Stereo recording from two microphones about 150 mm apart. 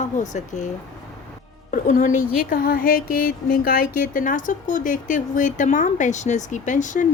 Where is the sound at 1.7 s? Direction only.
60° left (ahead or behind).